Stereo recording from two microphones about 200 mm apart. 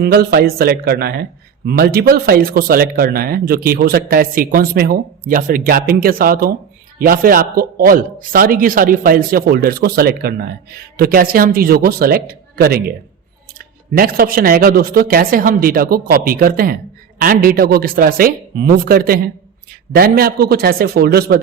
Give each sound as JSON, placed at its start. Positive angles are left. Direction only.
{"t": 0.0, "sound": "speech", "side_deg": -50}